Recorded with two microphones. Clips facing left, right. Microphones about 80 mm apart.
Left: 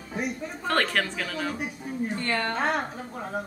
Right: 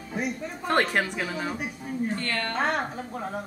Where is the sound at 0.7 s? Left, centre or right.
Centre.